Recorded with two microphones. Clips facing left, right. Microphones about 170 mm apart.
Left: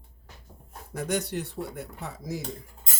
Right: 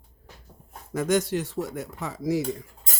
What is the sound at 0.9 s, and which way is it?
Speech, 90° right.